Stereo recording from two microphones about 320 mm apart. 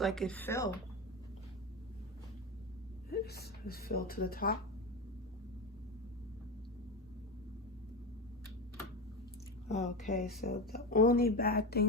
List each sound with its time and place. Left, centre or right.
0.0 s speech: centre
3.1 s speech: left
9.6 s speech: left